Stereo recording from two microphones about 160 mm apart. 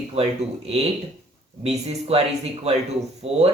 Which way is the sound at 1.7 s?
40° right (ahead or behind).